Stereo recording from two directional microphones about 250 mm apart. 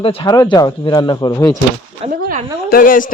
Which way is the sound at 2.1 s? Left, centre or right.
Right.